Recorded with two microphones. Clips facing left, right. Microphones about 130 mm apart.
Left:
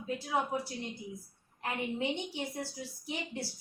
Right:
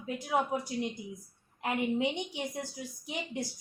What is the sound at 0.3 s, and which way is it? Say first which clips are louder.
A woman's voice: right 3 dB; 15° right (ahead or behind).